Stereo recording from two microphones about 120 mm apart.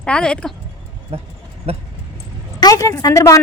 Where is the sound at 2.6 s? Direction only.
30° left (ahead or behind).